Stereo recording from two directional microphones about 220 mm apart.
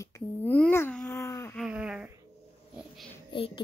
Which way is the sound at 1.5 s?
5° right (ahead or behind).